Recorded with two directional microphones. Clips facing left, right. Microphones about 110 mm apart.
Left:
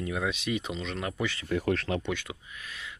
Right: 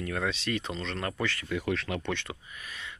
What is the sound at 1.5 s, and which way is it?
Speech, 40° left (ahead or behind).